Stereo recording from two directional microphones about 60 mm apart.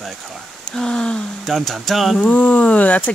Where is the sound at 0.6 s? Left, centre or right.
Centre.